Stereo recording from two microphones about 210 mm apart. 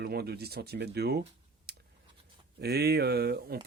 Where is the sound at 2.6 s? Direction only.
50° right (ahead or behind).